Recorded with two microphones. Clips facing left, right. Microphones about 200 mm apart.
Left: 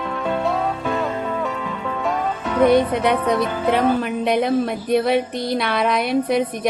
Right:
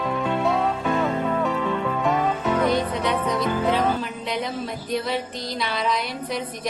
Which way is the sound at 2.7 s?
60° left (ahead or behind).